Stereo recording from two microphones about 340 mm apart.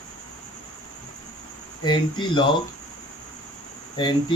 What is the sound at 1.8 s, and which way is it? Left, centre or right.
Speech, centre.